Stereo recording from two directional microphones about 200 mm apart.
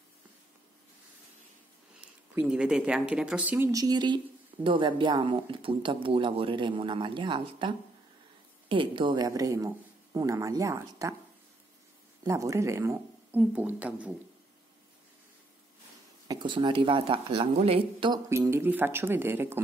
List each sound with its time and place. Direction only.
2.3 s speech: 5° right (ahead or behind)
12.3 s speech: 15° right (ahead or behind)
16.3 s speech: 25° right (ahead or behind)
18.3 s speech: 10° right (ahead or behind)